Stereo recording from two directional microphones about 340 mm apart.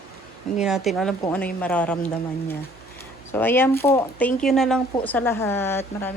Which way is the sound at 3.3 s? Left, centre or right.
Centre.